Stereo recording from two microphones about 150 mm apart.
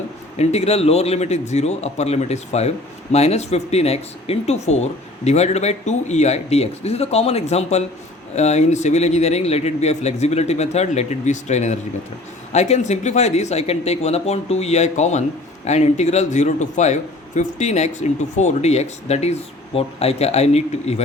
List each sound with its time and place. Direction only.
0.3 s a man's voice: 45° left (ahead or behind)